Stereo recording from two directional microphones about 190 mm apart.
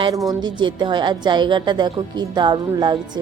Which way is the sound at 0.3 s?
25° right (ahead or behind).